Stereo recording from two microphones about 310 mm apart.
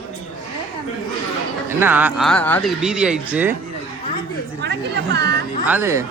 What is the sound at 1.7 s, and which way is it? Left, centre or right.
Speech, centre.